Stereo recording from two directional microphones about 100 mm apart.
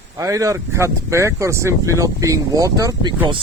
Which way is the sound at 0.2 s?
35° right (ahead or behind).